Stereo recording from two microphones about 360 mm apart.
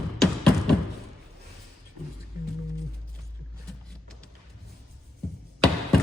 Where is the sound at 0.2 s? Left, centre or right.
Centre.